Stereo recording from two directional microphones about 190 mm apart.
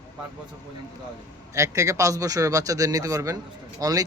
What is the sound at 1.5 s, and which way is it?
Speech, 15° right (ahead or behind).